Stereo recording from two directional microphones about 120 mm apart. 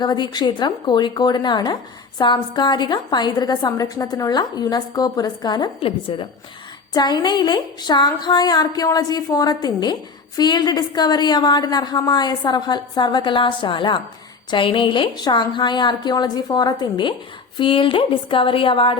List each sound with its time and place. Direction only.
0.0 s speech: 35° left (ahead or behind)
5.8 s speech: 50° left (ahead or behind)
6.9 s speech: 35° left (ahead or behind)